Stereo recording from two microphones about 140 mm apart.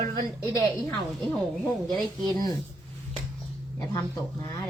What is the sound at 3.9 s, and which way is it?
Speech, 30° left (ahead or behind).